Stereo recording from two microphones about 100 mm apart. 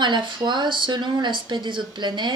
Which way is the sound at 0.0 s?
50° right (ahead or behind).